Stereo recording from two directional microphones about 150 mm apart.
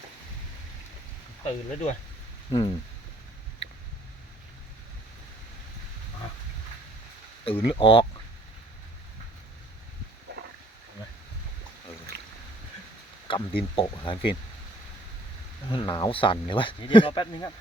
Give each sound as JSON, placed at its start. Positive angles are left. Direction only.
{"t": 1.5, "sound": "speech", "side_deg": 45}
{"t": 2.5, "sound": "speech", "side_deg": 30}
{"t": 7.4, "sound": "speech", "side_deg": 35}
{"t": 13.2, "sound": "speech", "side_deg": 35}
{"t": 15.7, "sound": "speech", "side_deg": 35}